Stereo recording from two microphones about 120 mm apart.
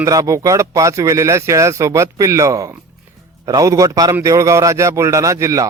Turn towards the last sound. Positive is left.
turn(degrees=-25)  # may be behind; listen again after turning